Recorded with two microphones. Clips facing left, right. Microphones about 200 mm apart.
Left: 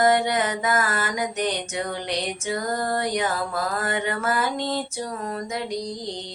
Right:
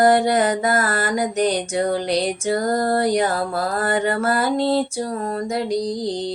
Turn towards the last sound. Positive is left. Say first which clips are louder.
# right 8 dB
turn(degrees=-35)  # may be behind; listen again after turning